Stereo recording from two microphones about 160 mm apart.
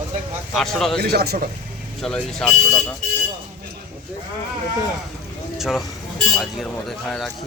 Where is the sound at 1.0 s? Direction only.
80° right.